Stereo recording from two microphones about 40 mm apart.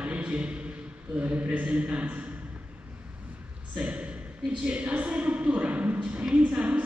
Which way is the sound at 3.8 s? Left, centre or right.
Right.